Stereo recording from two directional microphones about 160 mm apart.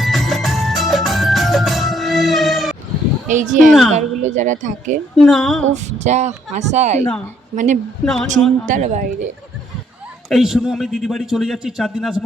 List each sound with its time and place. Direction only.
0.0 s music: centre (ahead or behind)
3.2 s speech: 55° right (ahead or behind)
3.7 s a man's voice: centre (ahead or behind)
3.9 s speech: 50° right (ahead or behind)
5.1 s a man's voice: centre (ahead or behind)
5.7 s speech: 45° right (ahead or behind)
8.0 s a man's voice: 5° left (ahead or behind)
8.6 s speech: 50° right (ahead or behind)
10.2 s a man's voice: centre (ahead or behind)